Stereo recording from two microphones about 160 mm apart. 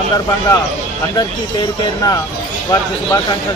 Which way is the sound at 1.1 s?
25° left (ahead or behind).